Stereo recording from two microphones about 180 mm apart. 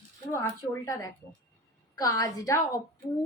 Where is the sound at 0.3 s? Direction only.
15° left (ahead or behind).